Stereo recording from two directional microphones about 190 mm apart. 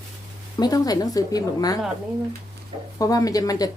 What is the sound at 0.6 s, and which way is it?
Speech, 20° left (ahead or behind).